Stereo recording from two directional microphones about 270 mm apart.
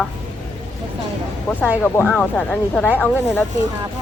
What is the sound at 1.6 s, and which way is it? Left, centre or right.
A woman's voice, centre.